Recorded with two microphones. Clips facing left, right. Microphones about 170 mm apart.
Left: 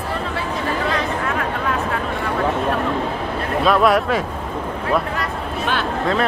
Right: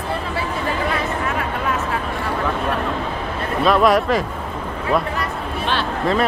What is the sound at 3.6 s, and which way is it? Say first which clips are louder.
Speech: right 1 dB; centre (ahead or behind).